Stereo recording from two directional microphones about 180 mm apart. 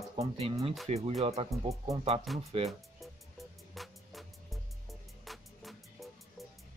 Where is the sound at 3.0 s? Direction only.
Centre (ahead or behind).